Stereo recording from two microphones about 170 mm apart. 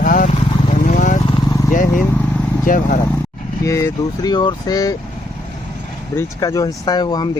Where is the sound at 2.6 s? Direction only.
50° left (ahead or behind).